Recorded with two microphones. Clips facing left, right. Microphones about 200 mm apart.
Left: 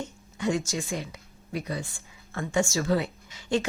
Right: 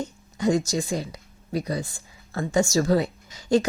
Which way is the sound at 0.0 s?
35° right (ahead or behind).